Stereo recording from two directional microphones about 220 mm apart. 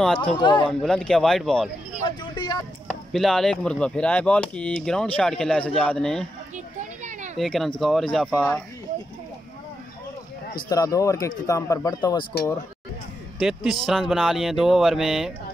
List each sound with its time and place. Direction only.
0.0 s speech: 5° left (ahead or behind)
0.4 s speech: 20° left (ahead or behind)
0.7 s speech: 5° left (ahead or behind)
2.0 s speech: 20° left (ahead or behind)
2.9 s speech: centre (ahead or behind)
6.5 s children playing: 35° right (ahead or behind)
7.3 s speech: centre (ahead or behind)
10.7 s speech: 15° left (ahead or behind)
13.4 s speech: centre (ahead or behind)